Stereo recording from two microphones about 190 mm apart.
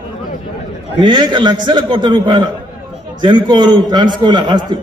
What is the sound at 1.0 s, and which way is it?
A man's voice, 25° right (ahead or behind).